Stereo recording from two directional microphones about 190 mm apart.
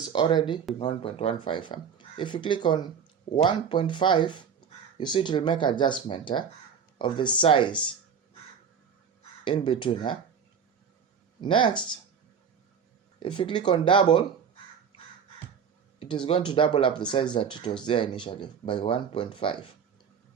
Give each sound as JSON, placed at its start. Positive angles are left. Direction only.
{"t": 0.1, "sound": "speech", "side_deg": 25}
{"t": 9.4, "sound": "speech", "side_deg": 25}
{"t": 11.3, "sound": "speech", "side_deg": 25}
{"t": 13.1, "sound": "speech", "side_deg": 25}
{"t": 16.0, "sound": "speech", "side_deg": 25}